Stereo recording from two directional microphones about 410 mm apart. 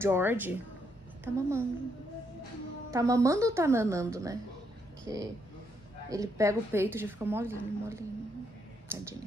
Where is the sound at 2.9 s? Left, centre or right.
Centre.